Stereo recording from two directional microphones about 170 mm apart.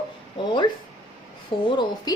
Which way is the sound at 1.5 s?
30° left (ahead or behind).